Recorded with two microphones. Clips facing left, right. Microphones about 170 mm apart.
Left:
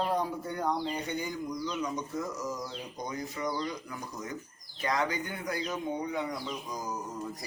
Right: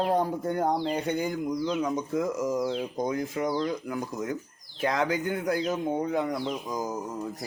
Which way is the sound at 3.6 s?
50° right (ahead or behind).